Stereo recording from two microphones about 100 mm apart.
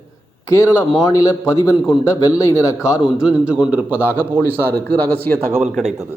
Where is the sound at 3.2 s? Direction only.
10° right (ahead or behind).